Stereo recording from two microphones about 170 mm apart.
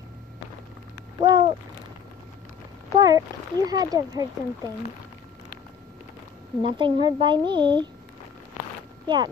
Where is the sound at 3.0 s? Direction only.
25° right (ahead or behind).